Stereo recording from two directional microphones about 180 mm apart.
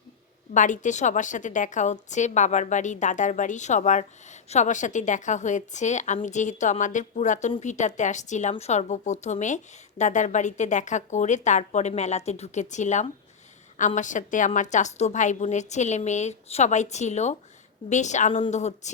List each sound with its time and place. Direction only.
0.5 s a woman's voice: 45° left (ahead or behind)